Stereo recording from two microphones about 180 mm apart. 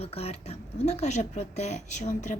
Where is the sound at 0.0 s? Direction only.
35° left (ahead or behind).